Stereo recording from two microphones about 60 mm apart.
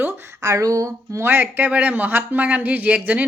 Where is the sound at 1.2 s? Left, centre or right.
Right.